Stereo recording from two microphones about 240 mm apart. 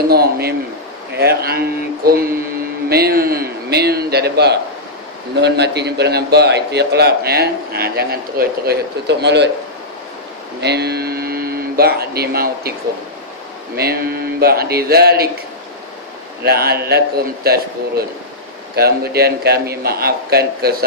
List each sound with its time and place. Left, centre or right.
0.1 s a man's voice: right
10.6 s speech: right
13.7 s a man's voice: right
16.4 s a man's voice: right